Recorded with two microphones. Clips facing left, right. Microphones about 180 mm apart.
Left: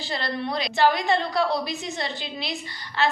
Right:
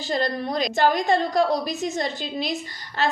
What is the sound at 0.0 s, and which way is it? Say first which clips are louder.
A woman's voice: right 4 dB; 45° right (ahead or behind).